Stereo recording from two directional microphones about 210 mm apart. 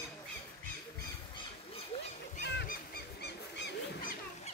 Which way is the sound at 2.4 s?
50° left (ahead or behind).